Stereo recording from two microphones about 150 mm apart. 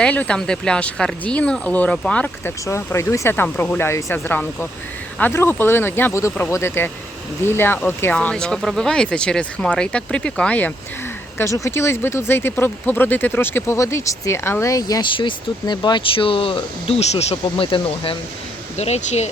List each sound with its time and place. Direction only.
0.0 s speech: 10° left (ahead or behind)
11.3 s speech: 20° left (ahead or behind); by 18.2 s 35° left (ahead or behind)
18.8 s speech: 45° left (ahead or behind)